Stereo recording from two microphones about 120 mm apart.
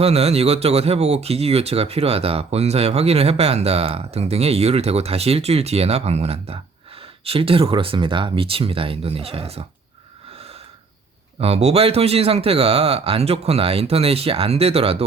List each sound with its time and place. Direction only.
0.0 s speech: 60° right (ahead or behind)
11.3 s speech: 60° right (ahead or behind)